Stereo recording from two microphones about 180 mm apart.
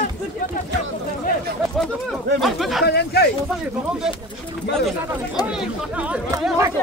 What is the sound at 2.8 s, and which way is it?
Speech, 65° left (ahead or behind).